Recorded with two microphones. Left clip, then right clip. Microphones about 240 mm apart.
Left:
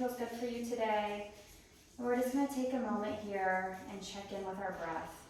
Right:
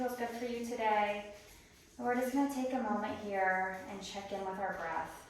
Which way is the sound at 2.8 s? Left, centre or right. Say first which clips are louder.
Right 1 dB; centre.